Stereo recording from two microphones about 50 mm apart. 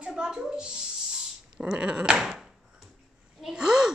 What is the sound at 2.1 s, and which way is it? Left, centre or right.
Speech, centre.